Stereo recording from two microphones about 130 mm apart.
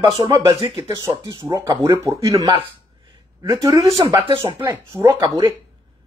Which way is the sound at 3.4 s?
25° right (ahead or behind).